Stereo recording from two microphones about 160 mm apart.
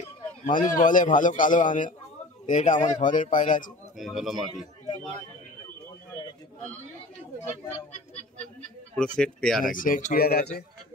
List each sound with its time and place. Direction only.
0.0 s a man's voice: 50° left (ahead or behind)
4.0 s speech: centre (ahead or behind)
8.9 s speech: 5° left (ahead or behind)
9.7 s speech: 60° left (ahead or behind); by 10.6 s 75° left (ahead or behind)